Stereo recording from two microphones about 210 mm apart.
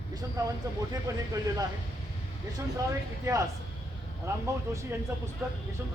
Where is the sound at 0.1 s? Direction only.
20° right (ahead or behind).